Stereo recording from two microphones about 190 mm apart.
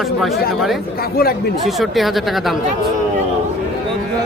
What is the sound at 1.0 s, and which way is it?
Speech, 55° left (ahead or behind).